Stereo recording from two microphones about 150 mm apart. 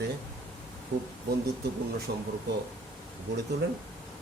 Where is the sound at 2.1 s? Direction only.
90° right.